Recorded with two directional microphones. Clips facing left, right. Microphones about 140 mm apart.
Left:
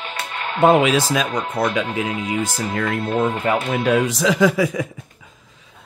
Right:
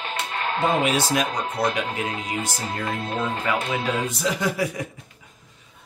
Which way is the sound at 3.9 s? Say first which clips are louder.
Left 11 dB; 85° left.